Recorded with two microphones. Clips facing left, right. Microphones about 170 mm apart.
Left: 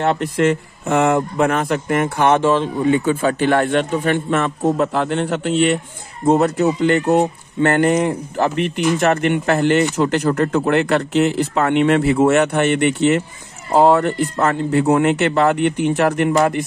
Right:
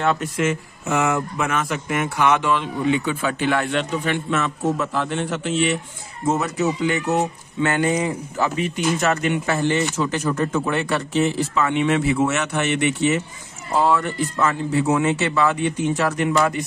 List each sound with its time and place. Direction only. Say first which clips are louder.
0.2 s speech: left 6 dB; 60° left (ahead or behind)